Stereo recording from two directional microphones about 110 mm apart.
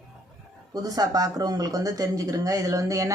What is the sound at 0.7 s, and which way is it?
Speech, 35° right (ahead or behind).